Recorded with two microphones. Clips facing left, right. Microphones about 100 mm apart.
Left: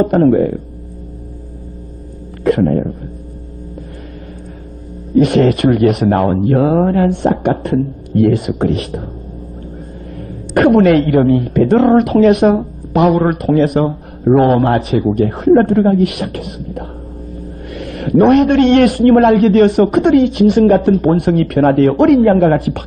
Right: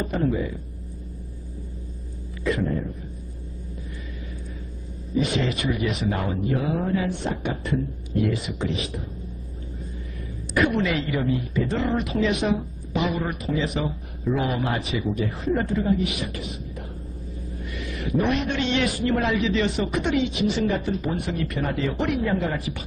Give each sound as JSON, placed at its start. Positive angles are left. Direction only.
{"t": 0.0, "sound": "a man's voice", "side_deg": 60}
{"t": 2.4, "sound": "a man's voice", "side_deg": 60}
{"t": 5.1, "sound": "a man's voice", "side_deg": 60}
{"t": 10.1, "sound": "a woman's voice", "side_deg": 60}